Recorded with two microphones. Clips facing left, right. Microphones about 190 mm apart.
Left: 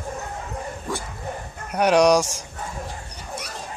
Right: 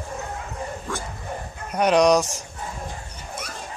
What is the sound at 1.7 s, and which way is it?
Speech, 10° left (ahead or behind).